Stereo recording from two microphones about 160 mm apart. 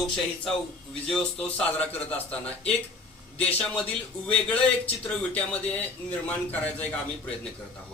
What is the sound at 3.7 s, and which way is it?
A man's voice, 5° left (ahead or behind).